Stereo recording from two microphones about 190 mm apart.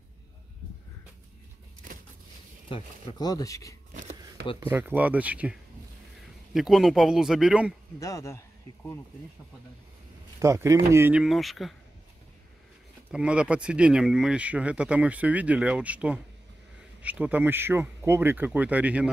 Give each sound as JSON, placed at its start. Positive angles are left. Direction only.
{"t": 2.7, "sound": "speech", "side_deg": 25}
{"t": 4.6, "sound": "speech", "side_deg": -10}
{"t": 8.0, "sound": "speech", "side_deg": 15}
{"t": 10.4, "sound": "speech", "side_deg": -15}
{"t": 13.1, "sound": "speech", "side_deg": -5}